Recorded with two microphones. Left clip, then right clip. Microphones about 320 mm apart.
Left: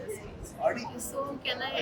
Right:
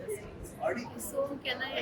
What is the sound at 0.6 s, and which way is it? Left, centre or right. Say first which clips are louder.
Speech: left 4 dB; left.